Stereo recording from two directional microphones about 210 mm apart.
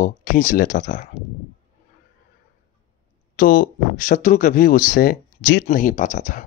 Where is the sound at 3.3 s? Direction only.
40° left (ahead or behind).